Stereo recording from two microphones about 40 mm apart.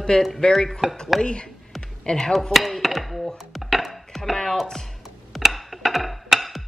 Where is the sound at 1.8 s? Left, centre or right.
Centre.